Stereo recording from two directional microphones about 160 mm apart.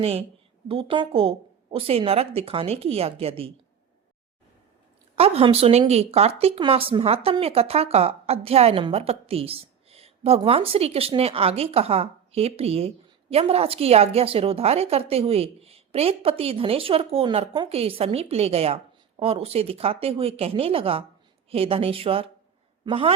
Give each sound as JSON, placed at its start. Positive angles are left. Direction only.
{"t": 0.0, "sound": "speech", "side_deg": -40}
{"t": 5.1, "sound": "speech", "side_deg": -40}